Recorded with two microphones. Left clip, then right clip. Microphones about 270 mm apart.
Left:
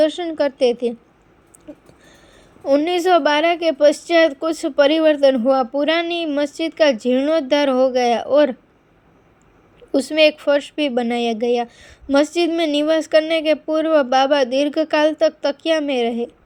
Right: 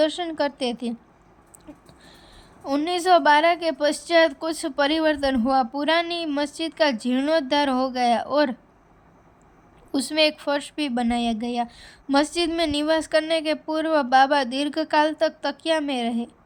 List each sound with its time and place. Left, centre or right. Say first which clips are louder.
0.0 s a woman's voice: left 5 dB; centre
2.6 s a woman's voice: left 5 dB; centre
9.9 s a woman's voice: left 6 dB; centre